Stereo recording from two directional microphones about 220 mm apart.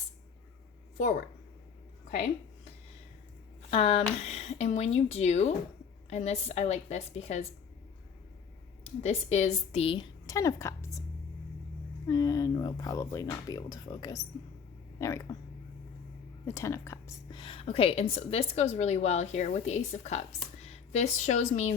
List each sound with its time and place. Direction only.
3.7 s a woman's voice: 25° left (ahead or behind)
8.8 s a woman's voice: 30° left (ahead or behind)
12.0 s speech: 15° left (ahead or behind)
16.5 s a woman's voice: 15° left (ahead or behind); by 21.4 s 35° left (ahead or behind)